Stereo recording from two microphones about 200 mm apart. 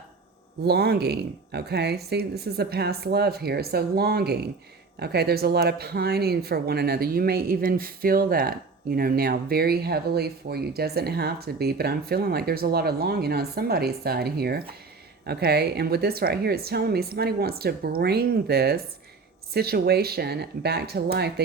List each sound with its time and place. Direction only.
0.6 s speech: 55° right (ahead or behind)